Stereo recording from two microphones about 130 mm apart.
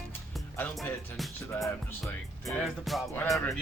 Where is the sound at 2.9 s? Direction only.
Centre (ahead or behind).